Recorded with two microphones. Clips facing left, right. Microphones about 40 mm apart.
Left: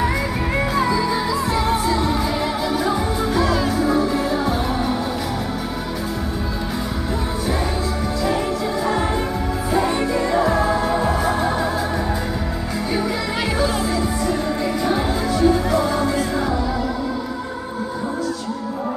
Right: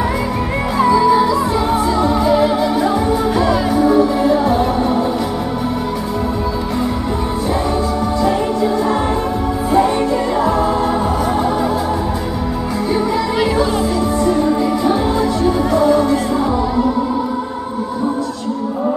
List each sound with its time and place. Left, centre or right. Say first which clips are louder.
0.7 s music: right 11 dB; centre
9.7 s music: right 6 dB; centre
12.9 s music: right 6 dB; centre
15.4 s music: right 3 dB; centre